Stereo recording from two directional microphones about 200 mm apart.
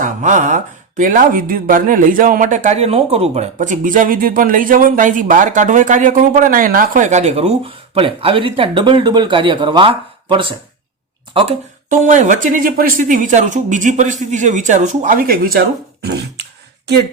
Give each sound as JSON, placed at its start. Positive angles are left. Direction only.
{"t": 0.0, "sound": "speech", "side_deg": -40}